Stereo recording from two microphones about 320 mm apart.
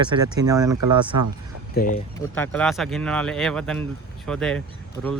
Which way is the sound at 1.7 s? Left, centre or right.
Left.